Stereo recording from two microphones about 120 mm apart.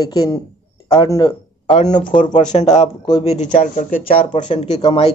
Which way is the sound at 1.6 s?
65° left (ahead or behind).